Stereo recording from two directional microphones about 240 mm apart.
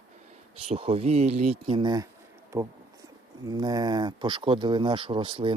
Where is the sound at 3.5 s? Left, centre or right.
Centre.